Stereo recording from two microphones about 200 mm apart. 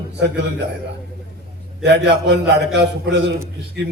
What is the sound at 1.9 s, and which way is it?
A man's voice, 60° right (ahead or behind).